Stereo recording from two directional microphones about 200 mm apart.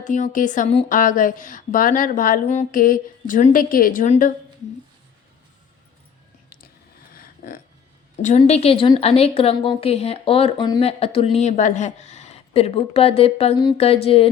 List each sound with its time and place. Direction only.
0.0 s a woman's voice: 40° left (ahead or behind)
7.1 s a sound: 45° left (ahead or behind)
8.2 s speech: 35° left (ahead or behind)